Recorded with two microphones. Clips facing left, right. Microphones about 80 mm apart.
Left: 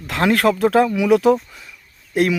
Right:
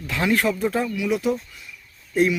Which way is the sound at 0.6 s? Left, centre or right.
Left.